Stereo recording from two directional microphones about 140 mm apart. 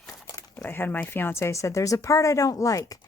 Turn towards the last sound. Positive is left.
turn(degrees=25)  # may be behind; listen again after turning